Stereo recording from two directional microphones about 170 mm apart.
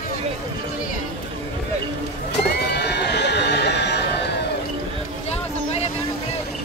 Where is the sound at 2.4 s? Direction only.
80° left.